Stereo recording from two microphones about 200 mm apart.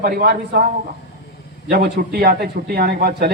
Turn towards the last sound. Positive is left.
turn(degrees=-50)  # may be behind; listen again after turning